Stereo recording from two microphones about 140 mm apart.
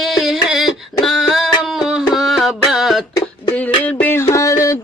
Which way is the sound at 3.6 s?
10° left (ahead or behind).